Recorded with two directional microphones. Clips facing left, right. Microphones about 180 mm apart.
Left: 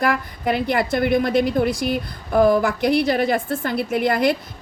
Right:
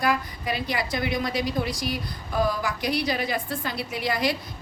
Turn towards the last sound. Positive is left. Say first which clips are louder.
# left 8 dB
turn(degrees=55)  # may be behind; listen again after turning